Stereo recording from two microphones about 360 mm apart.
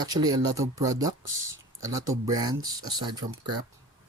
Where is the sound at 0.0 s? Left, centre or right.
Centre.